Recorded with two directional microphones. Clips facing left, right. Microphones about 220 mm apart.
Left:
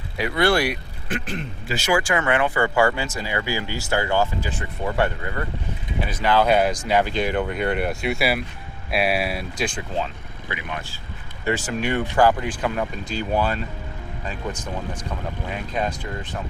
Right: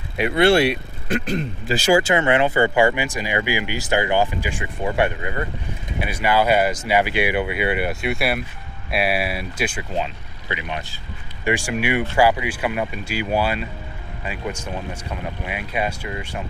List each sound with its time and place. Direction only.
0.2 s speech: 25° right (ahead or behind)
1.0 s speech: 40° right (ahead or behind); by 10.0 s 5° right (ahead or behind)
10.5 s speech: 20° right (ahead or behind)